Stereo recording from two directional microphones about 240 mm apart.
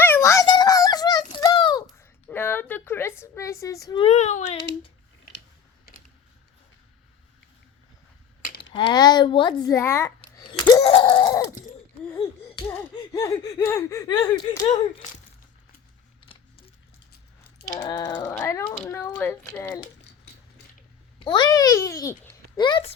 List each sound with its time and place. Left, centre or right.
0.0 s a sound: centre; by 4.5 s left
8.7 s speech: centre
10.3 s laughter: centre
10.7 s speech: centre
12.5 s speech: centre
16.2 s a sound: left
17.6 s speech: centre
21.2 s a child's voice: left